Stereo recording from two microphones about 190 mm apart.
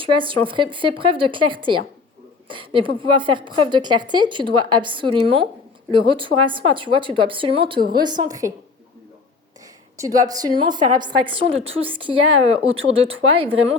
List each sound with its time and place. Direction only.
0.0 s a woman's voice: 25° right (ahead or behind)
10.0 s a woman's voice: 20° right (ahead or behind)